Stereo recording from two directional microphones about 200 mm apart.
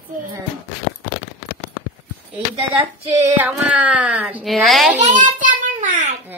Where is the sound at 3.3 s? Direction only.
10° right (ahead or behind).